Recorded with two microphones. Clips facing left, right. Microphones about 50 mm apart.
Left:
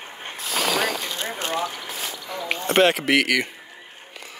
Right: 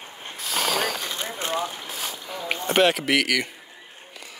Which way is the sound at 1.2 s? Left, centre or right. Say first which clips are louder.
Left 1 dB; left.